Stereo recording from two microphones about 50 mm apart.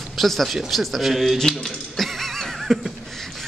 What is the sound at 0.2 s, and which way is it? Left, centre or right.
A man's voice, centre.